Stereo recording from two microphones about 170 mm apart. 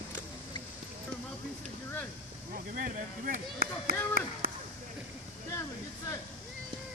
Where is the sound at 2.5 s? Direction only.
55° right (ahead or behind).